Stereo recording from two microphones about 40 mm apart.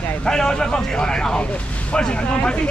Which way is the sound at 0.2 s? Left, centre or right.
Centre.